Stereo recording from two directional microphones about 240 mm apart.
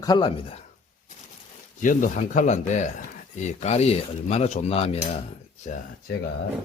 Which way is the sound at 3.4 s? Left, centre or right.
Left.